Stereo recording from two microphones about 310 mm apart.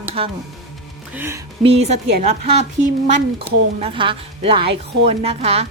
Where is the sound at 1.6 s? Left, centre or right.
Centre.